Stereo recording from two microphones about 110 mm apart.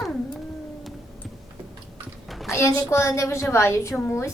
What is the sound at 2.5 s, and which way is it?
A woman's voice, 25° left (ahead or behind).